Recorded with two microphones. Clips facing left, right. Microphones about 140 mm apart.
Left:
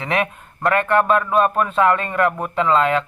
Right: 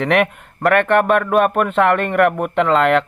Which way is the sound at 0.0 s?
70° right (ahead or behind).